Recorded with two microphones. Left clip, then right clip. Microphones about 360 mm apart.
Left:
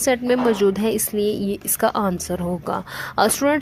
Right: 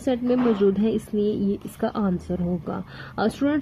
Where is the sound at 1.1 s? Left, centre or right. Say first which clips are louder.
Left 3 dB; left.